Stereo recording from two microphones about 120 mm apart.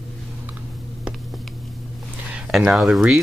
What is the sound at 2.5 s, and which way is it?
Speech, centre (ahead or behind).